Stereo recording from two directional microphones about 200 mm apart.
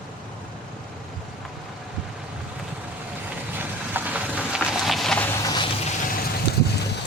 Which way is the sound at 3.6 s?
10° right (ahead or behind).